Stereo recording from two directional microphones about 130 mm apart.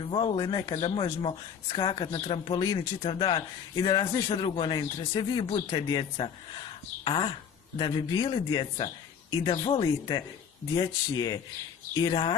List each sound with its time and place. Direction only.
0.0 s speech: 40° left (ahead or behind)